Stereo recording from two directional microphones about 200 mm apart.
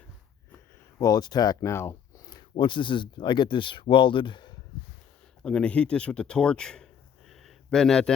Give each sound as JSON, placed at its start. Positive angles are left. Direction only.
{"t": 0.9, "sound": "speech", "side_deg": 20}
{"t": 5.4, "sound": "speech", "side_deg": 5}